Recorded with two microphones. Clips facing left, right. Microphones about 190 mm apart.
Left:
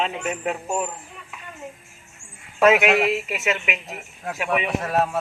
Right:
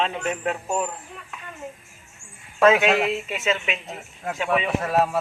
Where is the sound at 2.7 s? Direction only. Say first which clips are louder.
Left 1 dB; 10° left (ahead or behind).